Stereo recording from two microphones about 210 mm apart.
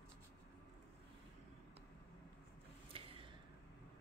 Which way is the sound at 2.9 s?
25° right (ahead or behind).